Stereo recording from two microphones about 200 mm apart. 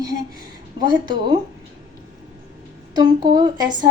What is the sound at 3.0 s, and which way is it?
Speech, 20° right (ahead or behind).